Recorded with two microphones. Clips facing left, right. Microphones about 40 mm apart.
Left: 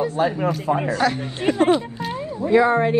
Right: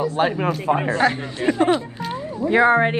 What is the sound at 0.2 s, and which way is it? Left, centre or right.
Speech, right.